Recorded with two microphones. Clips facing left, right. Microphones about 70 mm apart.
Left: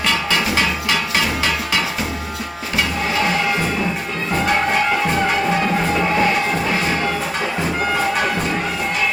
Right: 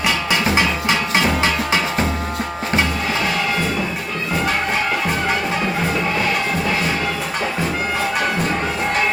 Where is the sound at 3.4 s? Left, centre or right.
Centre.